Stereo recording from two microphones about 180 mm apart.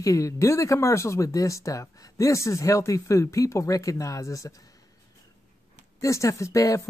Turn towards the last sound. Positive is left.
turn(degrees=15)  # may be behind; listen again after turning